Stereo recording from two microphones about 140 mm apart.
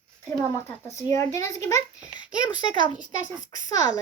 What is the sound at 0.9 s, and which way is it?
A child's voice, 20° left (ahead or behind).